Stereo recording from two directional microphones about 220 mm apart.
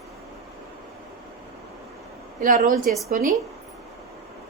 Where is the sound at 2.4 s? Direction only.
40° right (ahead or behind).